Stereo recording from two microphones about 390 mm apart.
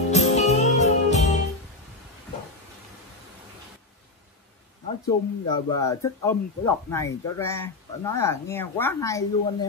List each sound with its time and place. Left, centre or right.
0.1 s music: centre
5.0 s speech: centre